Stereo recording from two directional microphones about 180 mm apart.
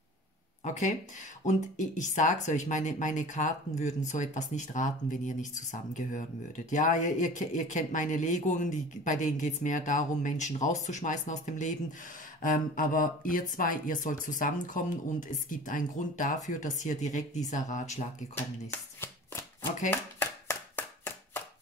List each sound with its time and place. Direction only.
0.7 s speech: 40° left (ahead or behind)
18.3 s shuffling cards: 15° left (ahead or behind)
19.9 s chopping: 10° left (ahead or behind)